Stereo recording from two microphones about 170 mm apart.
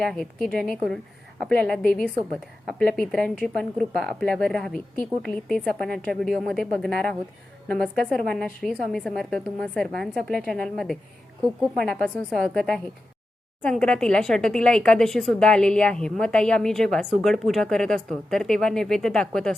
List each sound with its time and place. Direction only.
0.0 s speech: 5° left (ahead or behind)
1.8 s a woman's voice: 60° left (ahead or behind)
2.6 s speech: 5° left (ahead or behind)